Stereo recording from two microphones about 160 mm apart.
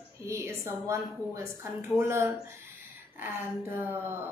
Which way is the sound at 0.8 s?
15° right (ahead or behind).